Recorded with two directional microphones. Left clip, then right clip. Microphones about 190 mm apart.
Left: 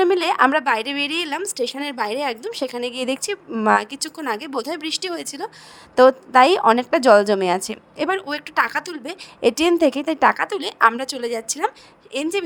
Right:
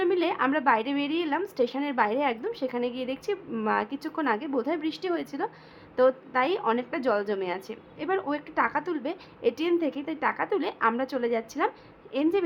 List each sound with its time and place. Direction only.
0.0 s a woman's voice: 50° left (ahead or behind)